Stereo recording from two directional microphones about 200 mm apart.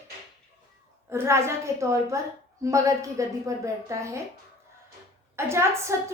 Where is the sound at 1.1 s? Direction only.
15° right (ahead or behind).